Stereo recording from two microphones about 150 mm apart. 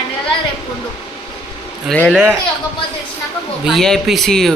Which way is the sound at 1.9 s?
10° left (ahead or behind).